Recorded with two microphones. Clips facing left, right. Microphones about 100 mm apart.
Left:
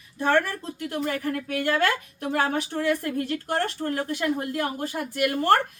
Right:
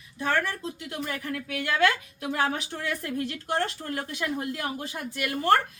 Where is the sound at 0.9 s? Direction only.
50° left (ahead or behind).